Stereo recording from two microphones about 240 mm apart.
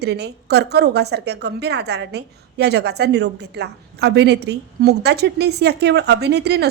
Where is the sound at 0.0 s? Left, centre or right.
Right.